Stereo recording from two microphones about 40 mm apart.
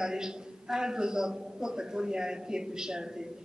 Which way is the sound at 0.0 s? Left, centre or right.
Centre.